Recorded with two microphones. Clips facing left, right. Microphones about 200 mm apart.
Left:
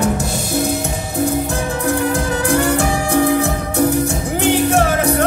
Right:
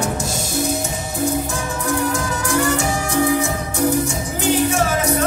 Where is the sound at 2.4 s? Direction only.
60° left (ahead or behind).